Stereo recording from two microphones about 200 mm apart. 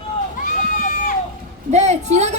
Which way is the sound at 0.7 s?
40° left (ahead or behind).